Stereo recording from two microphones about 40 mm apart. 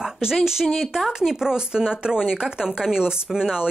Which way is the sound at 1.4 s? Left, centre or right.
Centre.